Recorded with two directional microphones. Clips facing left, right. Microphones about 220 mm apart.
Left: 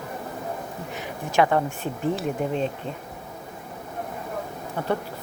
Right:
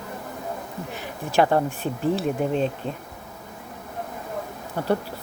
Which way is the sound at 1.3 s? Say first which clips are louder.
Right 1 dB; 35° right (ahead or behind).